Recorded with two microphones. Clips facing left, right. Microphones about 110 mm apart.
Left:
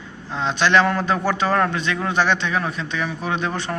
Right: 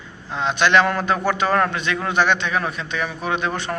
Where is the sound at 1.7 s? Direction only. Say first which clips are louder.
Even; 30° left (ahead or behind).